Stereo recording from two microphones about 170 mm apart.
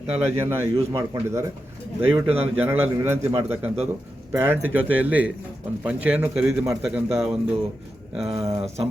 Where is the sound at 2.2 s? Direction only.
35° right (ahead or behind).